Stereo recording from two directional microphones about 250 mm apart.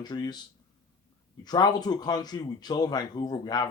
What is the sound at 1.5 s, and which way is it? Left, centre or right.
Speech, centre.